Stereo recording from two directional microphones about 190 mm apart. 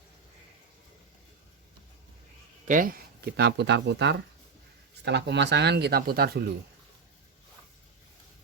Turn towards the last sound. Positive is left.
turn(degrees=-55)  # may be behind; listen again after turning